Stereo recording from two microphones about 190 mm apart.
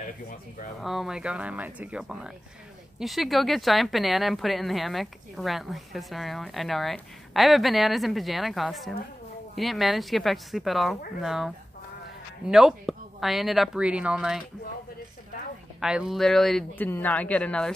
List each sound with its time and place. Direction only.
0.0 s speech: 45° left (ahead or behind)
0.7 s speech: centre (ahead or behind)
15.8 s speech: 5° right (ahead or behind)